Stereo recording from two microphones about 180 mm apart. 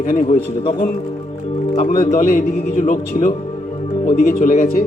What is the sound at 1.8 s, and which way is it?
Speech, 50° left (ahead or behind).